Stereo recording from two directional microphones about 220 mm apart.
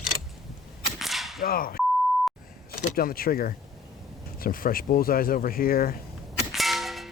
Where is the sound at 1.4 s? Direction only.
40° left (ahead or behind).